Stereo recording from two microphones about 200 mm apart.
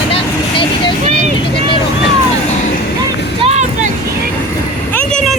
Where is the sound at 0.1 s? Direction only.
25° left (ahead or behind).